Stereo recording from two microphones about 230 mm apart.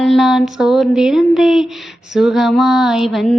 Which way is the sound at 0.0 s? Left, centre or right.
Centre.